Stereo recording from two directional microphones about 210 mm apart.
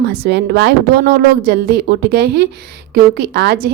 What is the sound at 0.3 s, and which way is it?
A woman's voice, 50° right (ahead or behind).